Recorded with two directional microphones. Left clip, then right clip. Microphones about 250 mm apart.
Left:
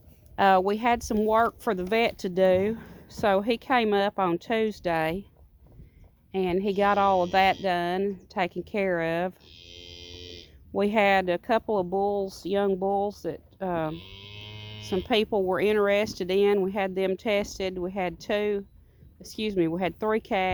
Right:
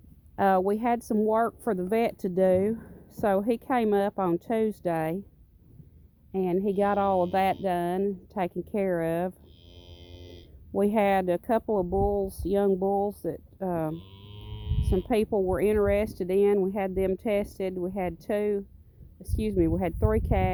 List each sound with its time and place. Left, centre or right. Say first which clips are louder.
0.3 s speech: left 3 dB; centre
6.3 s speech: left 1 dB; centre
9.5 s music: left 8 dB; centre
10.8 s speech: left 2 dB; centre
14.0 s livestock: left 7 dB; centre
14.9 s speech: left 1 dB; centre